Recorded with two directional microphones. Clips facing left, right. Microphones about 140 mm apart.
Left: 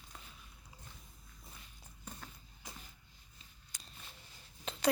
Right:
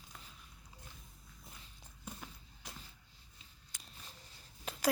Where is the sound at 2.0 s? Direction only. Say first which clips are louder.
Right 2 dB; 5° right (ahead or behind).